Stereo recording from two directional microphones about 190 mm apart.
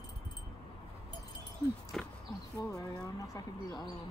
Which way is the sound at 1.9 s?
5° left (ahead or behind).